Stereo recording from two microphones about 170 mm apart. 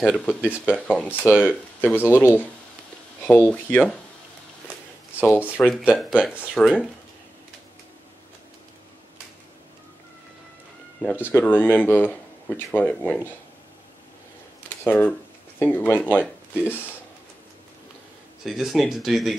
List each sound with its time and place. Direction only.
0.0 s speech: 5° left (ahead or behind)
5.6 s speech: 5° left (ahead or behind)
11.3 s speech: 10° left (ahead or behind)
14.9 s speech: 10° left (ahead or behind)
18.4 s speech: centre (ahead or behind)